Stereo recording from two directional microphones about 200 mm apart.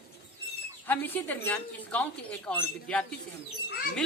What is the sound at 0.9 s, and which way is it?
Speech, 10° left (ahead or behind).